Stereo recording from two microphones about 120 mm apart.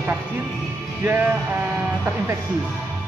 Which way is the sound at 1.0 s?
15° right (ahead or behind).